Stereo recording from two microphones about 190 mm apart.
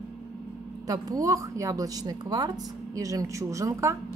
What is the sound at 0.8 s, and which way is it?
A woman's voice, 20° right (ahead or behind).